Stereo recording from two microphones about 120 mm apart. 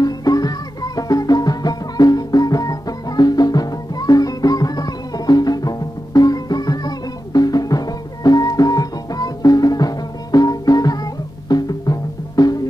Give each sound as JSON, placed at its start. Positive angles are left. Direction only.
{"t": 0.0, "sound": "music", "side_deg": 30}